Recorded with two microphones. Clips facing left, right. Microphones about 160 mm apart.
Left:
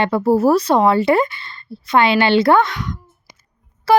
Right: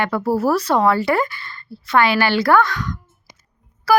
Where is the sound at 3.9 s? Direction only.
25° left (ahead or behind).